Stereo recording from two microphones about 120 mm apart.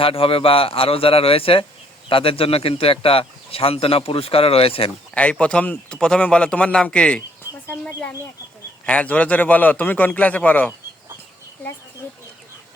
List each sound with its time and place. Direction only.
0.0 s speech: 50° left (ahead or behind)
5.1 s a man's voice: 10° left (ahead or behind)
7.7 s a sound: 15° left (ahead or behind)
8.9 s a man's voice: 10° left (ahead or behind)